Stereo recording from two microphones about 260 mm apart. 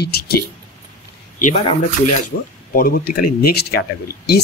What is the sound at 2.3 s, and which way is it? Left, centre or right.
Speech, left.